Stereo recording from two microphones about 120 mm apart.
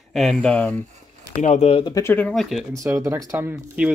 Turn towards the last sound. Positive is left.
turn(degrees=-15)  # may be behind; listen again after turning